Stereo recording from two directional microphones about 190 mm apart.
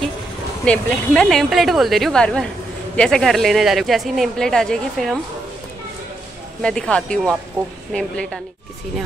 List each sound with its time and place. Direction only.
0.7 s a woman's voice: 5° left (ahead or behind)
6.6 s a woman's voice: 5° left (ahead or behind)